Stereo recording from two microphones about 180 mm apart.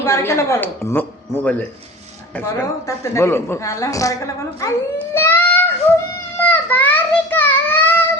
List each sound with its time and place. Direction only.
0.0 s a woman's voice: 15° left (ahead or behind)
5.1 s a sound: 10° left (ahead or behind)
6.4 s child singing: 10° left (ahead or behind)